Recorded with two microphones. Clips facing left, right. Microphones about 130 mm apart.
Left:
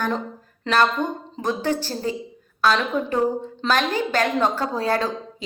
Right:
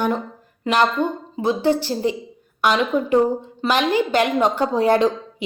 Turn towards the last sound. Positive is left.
turn(degrees=-20)  # may be behind; listen again after turning